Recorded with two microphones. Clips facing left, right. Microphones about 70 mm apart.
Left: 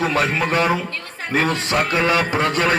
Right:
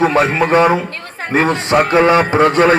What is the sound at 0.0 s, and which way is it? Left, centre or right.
A man's voice, right.